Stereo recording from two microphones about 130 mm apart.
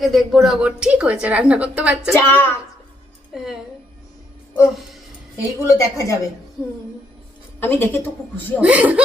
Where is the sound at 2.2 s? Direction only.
15° left (ahead or behind).